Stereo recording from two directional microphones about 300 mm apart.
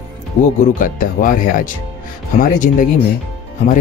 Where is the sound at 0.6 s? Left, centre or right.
Left.